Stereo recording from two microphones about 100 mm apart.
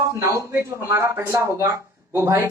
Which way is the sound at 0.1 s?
30° right (ahead or behind).